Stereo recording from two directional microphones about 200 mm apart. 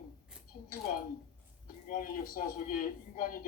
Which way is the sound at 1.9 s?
45° left (ahead or behind).